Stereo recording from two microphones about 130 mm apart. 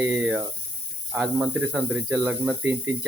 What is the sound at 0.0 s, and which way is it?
Speech, 15° right (ahead or behind).